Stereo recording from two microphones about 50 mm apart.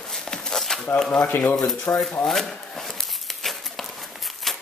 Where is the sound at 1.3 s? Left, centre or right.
Left.